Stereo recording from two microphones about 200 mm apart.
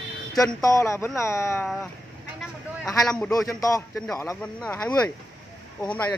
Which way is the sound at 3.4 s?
15° left (ahead or behind).